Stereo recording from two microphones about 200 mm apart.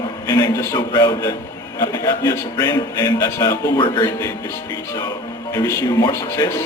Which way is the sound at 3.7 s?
25° left (ahead or behind).